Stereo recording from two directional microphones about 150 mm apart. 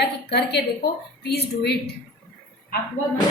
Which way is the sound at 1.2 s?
90° left.